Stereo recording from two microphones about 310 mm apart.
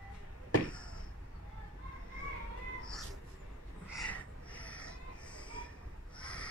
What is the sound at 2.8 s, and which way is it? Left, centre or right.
Cat, centre.